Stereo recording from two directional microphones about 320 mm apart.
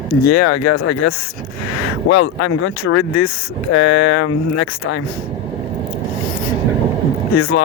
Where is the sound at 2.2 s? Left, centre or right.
Left.